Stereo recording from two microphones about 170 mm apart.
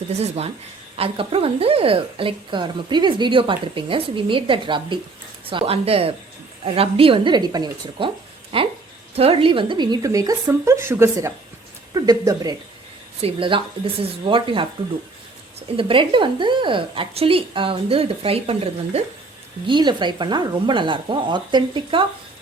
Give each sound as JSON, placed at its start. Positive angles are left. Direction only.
{"t": 0.1, "sound": "a woman's voice", "side_deg": -40}
{"t": 13.2, "sound": "a woman's voice", "side_deg": -30}
{"t": 15.7, "sound": "a woman's voice", "side_deg": -30}